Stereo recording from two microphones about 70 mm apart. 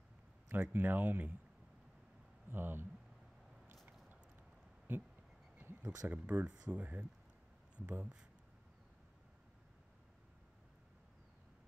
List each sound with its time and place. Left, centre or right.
0.5 s speech: right
2.5 s speech: right
4.9 s speech: right
5.6 s a sound: right
6.2 s speech: centre